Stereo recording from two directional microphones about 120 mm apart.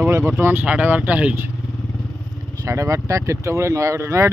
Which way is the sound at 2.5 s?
25° right (ahead or behind).